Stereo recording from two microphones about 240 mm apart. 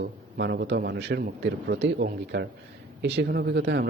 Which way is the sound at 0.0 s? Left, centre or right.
Right.